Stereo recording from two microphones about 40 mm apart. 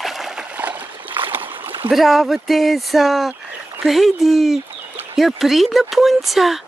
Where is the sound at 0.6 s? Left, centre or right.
Right.